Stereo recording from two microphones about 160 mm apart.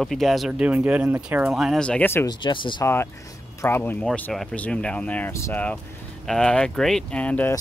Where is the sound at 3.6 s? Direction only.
15° left (ahead or behind).